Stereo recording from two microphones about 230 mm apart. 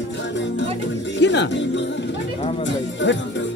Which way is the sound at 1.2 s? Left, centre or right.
Left.